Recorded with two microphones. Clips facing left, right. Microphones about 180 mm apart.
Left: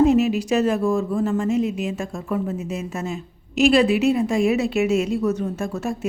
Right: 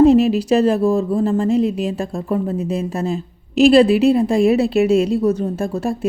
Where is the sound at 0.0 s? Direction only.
35° right (ahead or behind).